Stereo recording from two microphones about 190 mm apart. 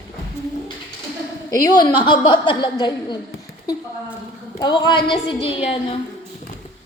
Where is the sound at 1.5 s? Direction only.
20° left (ahead or behind).